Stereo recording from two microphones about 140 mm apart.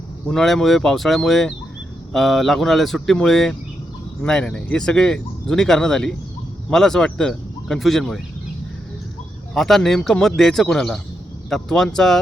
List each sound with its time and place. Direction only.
0.3 s speech: centre (ahead or behind)
9.6 s speech: centre (ahead or behind)